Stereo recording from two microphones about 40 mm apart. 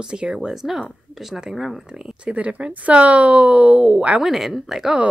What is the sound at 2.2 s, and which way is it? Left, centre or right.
Speech, right.